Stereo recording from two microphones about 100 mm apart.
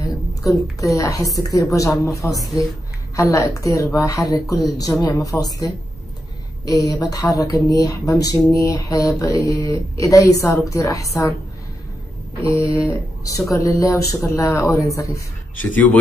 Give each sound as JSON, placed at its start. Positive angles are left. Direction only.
{"t": 0.4, "sound": "a woman's voice", "side_deg": 35}
{"t": 12.4, "sound": "a woman's voice", "side_deg": 30}
{"t": 15.7, "sound": "speech", "side_deg": 15}